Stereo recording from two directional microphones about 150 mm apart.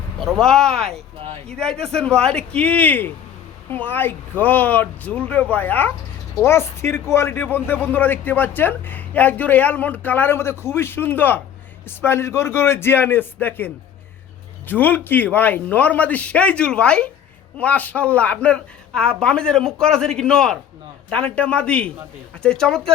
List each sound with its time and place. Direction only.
0.2 s a woman's voice: centre (ahead or behind)
14.7 s a woman's voice: 10° left (ahead or behind)